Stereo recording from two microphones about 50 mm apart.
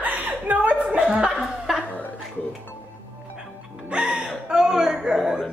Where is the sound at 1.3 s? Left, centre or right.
Centre.